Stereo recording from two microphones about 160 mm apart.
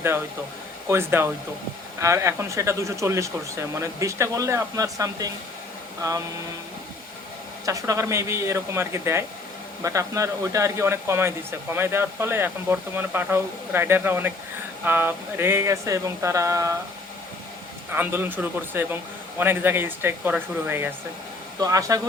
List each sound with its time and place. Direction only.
0.9 s speech: 15° right (ahead or behind)
7.6 s speech: 20° right (ahead or behind)
17.9 s speech: 15° right (ahead or behind)